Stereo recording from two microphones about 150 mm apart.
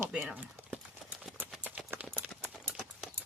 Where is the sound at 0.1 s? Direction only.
5° right (ahead or behind).